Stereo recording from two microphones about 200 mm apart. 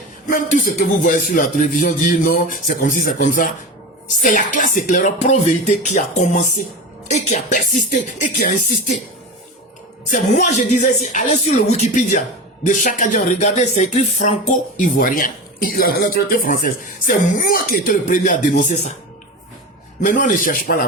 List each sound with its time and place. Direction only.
0.3 s speech: 45° left (ahead or behind)
10.1 s speech: 40° left (ahead or behind)
20.1 s speech: 40° left (ahead or behind)